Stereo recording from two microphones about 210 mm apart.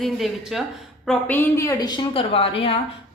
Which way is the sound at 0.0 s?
Centre (ahead or behind).